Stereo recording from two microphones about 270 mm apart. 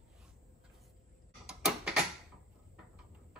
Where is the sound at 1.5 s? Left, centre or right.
Centre.